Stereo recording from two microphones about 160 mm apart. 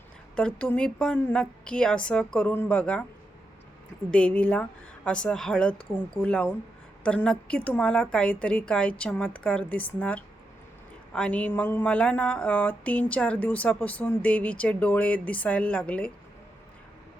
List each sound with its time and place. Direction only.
0.3 s speech: 5° left (ahead or behind)
4.1 s speech: 5° left (ahead or behind)